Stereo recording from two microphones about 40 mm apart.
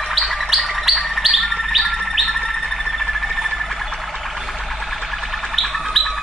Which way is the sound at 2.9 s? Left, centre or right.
Centre.